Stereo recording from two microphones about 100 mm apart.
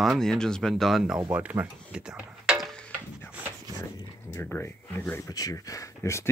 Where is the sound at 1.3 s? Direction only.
20° right (ahead or behind).